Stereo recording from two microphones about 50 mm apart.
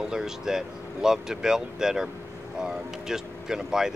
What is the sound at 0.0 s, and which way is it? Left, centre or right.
Speech, centre.